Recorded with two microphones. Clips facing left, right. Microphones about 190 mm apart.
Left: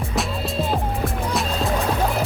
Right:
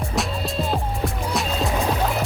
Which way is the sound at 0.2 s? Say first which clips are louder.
Left 1 dB; centre (ahead or behind).